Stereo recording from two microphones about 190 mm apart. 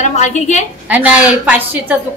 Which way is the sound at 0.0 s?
40° left (ahead or behind).